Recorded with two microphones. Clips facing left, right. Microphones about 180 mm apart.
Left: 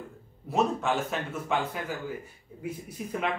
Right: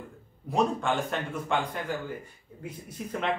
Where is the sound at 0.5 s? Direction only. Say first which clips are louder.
Even; 5° left (ahead or behind).